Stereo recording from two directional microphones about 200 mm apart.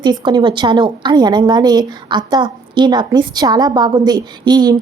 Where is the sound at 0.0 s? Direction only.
20° right (ahead or behind).